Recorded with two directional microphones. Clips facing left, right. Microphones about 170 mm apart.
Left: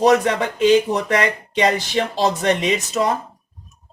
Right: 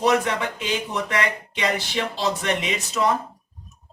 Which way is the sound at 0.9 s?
45° left (ahead or behind).